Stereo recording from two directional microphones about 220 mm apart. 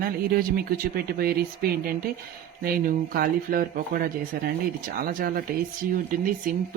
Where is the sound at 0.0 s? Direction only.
40° right (ahead or behind).